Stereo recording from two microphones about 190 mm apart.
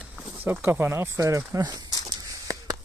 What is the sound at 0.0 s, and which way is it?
Speech, centre (ahead or behind).